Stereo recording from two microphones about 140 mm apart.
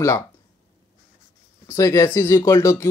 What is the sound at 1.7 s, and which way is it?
Speech, 20° left (ahead or behind).